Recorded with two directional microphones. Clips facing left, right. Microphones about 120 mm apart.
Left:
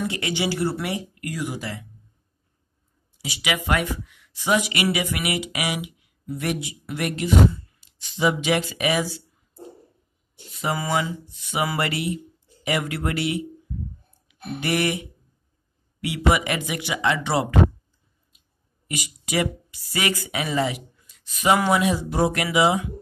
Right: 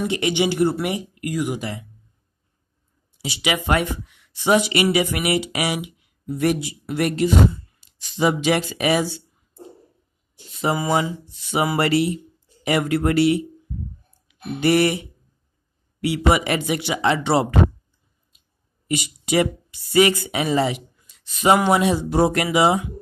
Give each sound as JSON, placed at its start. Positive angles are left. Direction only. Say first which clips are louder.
{"t": 0.0, "sound": "speech", "louder": "right 5 dB", "side_deg": -20}
{"t": 3.2, "sound": "speech", "louder": "right 3 dB", "side_deg": -30}
{"t": 10.6, "sound": "speech", "louder": "right 4 dB", "side_deg": -25}
{"t": 14.6, "sound": "speech", "louder": "right 6 dB", "side_deg": -35}
{"t": 18.9, "sound": "speech", "louder": "right 7 dB", "side_deg": -30}